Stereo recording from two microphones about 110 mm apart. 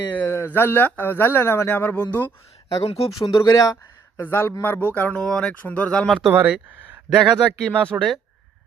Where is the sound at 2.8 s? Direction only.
65° left (ahead or behind).